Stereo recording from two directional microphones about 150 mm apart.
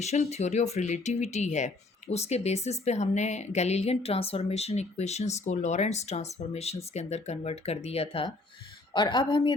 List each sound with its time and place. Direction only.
0.0 s a woman's voice: 45° left (ahead or behind)